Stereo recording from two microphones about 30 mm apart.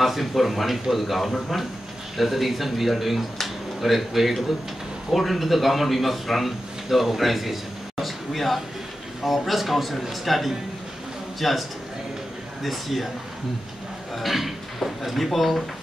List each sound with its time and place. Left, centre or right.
0.0 s a man's voice: centre
8.0 s a sound: centre
9.5 s a man's voice: centre
12.6 s a man's voice: centre
14.1 s a man's voice: centre